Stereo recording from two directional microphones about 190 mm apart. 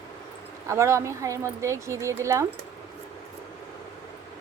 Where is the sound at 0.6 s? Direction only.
15° right (ahead or behind).